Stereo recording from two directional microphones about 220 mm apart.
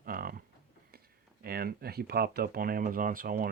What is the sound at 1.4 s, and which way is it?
Speech, 45° right (ahead or behind).